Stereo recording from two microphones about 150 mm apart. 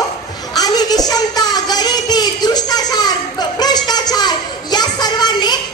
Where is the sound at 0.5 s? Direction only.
25° left (ahead or behind).